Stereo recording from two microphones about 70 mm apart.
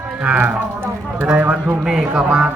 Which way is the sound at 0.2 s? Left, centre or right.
Right.